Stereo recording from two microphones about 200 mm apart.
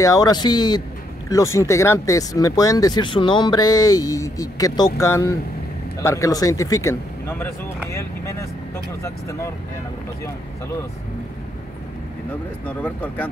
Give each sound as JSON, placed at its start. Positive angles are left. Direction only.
{"t": 0.0, "sound": "speech", "side_deg": 20}
{"t": 12.6, "sound": "speech", "side_deg": 5}